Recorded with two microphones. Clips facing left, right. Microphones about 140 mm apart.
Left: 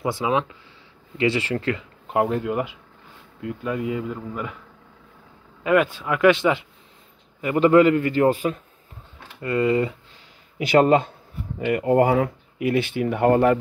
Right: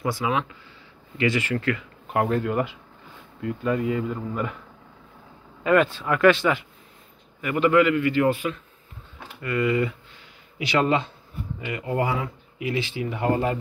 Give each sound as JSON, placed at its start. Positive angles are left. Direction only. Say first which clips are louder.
{"t": 0.0, "sound": "speech", "louder": "left 2 dB", "side_deg": 25}
{"t": 5.6, "sound": "speech", "louder": "even", "side_deg": 10}
{"t": 7.4, "sound": "a man's voice", "louder": "left 4 dB", "side_deg": 30}
{"t": 10.6, "sound": "speech", "louder": "left 6 dB", "side_deg": 50}